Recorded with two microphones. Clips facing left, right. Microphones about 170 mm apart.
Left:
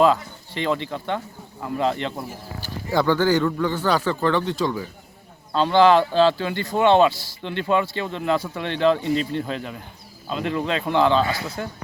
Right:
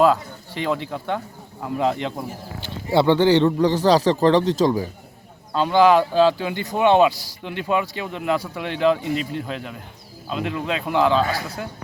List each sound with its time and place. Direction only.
0.0 s speech: 10° right (ahead or behind)
2.9 s a man's voice: 25° right (ahead or behind)
5.5 s speech: 10° right (ahead or behind)